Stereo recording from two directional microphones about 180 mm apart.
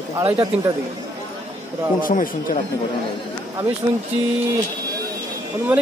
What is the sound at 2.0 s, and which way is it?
Speech, 50° left (ahead or behind).